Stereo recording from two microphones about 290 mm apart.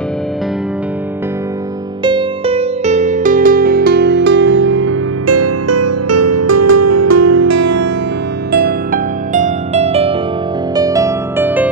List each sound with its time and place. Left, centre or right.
2.0 s music: centre; by 7.8 s right
8.5 s music: right; by 11.7 s centre